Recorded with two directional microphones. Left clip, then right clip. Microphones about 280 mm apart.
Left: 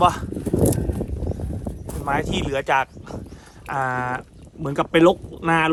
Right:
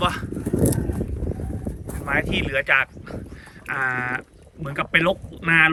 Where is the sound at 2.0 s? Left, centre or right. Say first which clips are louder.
Even; centre.